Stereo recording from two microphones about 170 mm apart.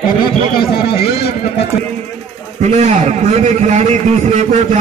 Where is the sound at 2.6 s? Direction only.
40° right (ahead or behind).